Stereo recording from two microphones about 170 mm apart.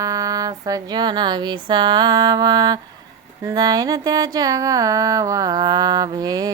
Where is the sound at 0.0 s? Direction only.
20° right (ahead or behind).